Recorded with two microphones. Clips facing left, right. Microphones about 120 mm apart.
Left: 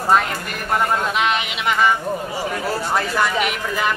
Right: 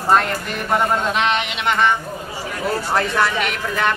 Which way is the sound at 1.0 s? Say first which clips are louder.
Right 1 dB; 5° left (ahead or behind).